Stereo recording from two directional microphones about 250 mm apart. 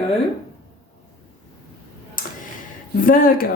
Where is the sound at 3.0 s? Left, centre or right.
Left.